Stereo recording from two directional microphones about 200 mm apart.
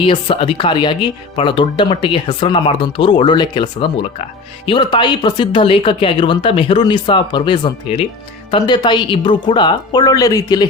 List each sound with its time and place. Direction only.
0.0 s speech: 25° left (ahead or behind)